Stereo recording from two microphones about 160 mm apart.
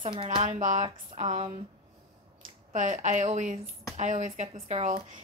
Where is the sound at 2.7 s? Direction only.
50° right (ahead or behind).